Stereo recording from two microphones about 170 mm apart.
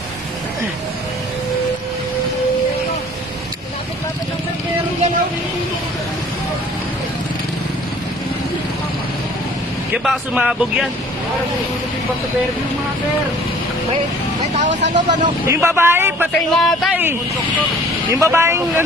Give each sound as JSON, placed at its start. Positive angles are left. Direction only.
{"t": 10.0, "sound": "speech", "side_deg": -5}
{"t": 14.6, "sound": "speech", "side_deg": -45}
{"t": 15.4, "sound": "speech", "side_deg": -15}
{"t": 16.3, "sound": "speech", "side_deg": 0}
{"t": 18.1, "sound": "speech", "side_deg": -15}